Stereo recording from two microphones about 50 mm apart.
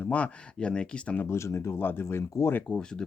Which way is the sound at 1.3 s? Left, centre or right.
Left.